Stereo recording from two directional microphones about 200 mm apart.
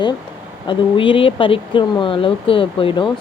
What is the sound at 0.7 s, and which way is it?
Speech, 25° left (ahead or behind).